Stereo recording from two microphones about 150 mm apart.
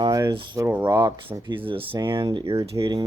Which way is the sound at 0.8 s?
30° right (ahead or behind).